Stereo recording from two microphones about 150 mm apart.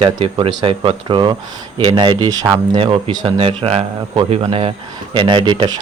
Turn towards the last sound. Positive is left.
turn(degrees=-35)  # may be behind; listen again after turning